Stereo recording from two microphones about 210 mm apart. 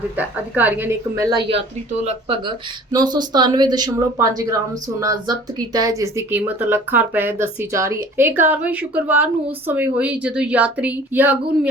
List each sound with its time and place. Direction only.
0.2 s speech: 10° right (ahead or behind)